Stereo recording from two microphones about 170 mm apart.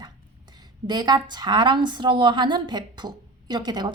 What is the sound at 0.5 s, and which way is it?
A woman's voice, 25° right (ahead or behind).